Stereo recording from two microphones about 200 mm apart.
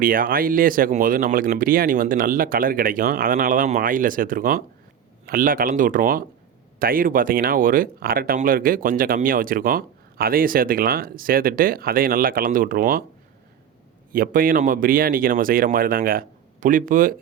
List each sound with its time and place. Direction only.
0.0 s speech: 45° right (ahead or behind)
14.1 s speech: 45° right (ahead or behind)